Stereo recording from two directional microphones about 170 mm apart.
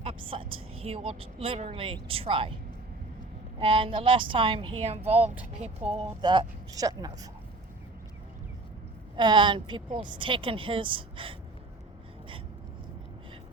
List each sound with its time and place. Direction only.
0.0 s a woman's voice: 35° right (ahead or behind)
3.6 s a woman's voice: 30° right (ahead or behind)
6.0 s a woman's voice: 25° right (ahead or behind)
9.1 s a woman's voice: 25° right (ahead or behind)